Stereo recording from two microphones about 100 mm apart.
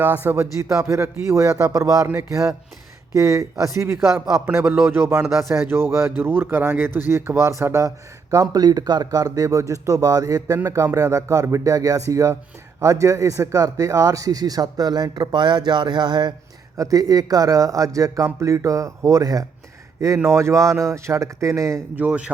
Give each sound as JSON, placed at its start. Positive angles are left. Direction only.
{"t": 0.0, "sound": "speech", "side_deg": -20}
{"t": 1.6, "sound": "speech", "side_deg": -35}
{"t": 3.1, "sound": "speech", "side_deg": -30}
{"t": 16.7, "sound": "speech", "side_deg": -35}
{"t": 21.9, "sound": "speech", "side_deg": -15}